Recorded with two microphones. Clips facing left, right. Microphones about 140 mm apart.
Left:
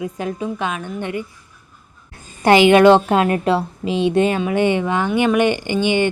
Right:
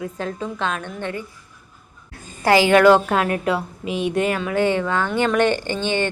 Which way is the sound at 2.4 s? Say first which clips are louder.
Left 3 dB; 20° left (ahead or behind).